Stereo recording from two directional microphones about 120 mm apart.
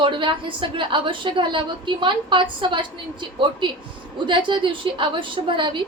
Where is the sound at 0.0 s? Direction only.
45° right (ahead or behind).